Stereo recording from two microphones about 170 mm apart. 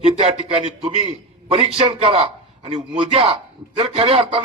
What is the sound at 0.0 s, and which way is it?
A man's voice, 35° right (ahead or behind).